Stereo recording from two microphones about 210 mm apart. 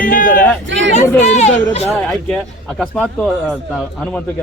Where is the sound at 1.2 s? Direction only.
35° left (ahead or behind).